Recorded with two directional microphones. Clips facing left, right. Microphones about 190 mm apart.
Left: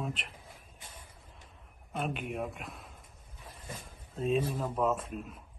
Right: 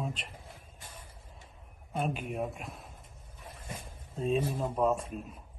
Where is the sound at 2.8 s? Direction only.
25° right (ahead or behind).